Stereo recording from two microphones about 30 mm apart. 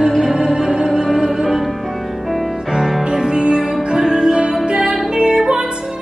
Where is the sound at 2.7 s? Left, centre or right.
Right.